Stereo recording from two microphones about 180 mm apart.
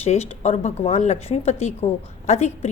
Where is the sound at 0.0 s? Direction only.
35° left (ahead or behind).